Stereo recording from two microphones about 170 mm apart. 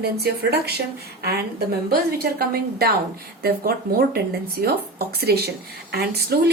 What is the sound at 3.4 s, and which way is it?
A woman's voice, 60° right (ahead or behind).